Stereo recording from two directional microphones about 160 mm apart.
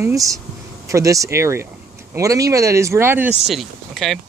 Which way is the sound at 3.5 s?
Centre (ahead or behind).